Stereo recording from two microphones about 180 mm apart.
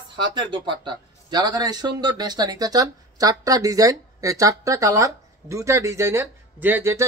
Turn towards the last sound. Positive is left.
turn(degrees=-15)  # may be behind; listen again after turning